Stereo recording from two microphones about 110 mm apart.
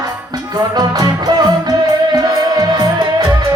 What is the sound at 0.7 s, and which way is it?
Music, 35° right (ahead or behind).